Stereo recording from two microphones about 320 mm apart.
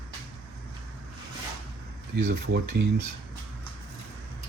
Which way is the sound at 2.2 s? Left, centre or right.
Right.